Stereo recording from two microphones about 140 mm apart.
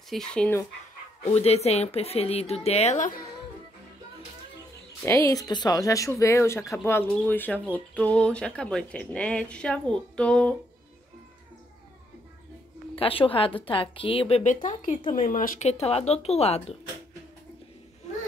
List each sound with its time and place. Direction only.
0.1 s speech: 5° left (ahead or behind)
1.2 s speech: 50° left (ahead or behind); by 3.3 s 70° left (ahead or behind)
5.0 s speech: 20° left (ahead or behind)
12.9 s a woman's voice: 40° left (ahead or behind)
14.4 s speech: 65° left (ahead or behind)
15.0 s speech: 50° left (ahead or behind)
15.3 s speech: 80° left
15.6 s speech: 50° left (ahead or behind)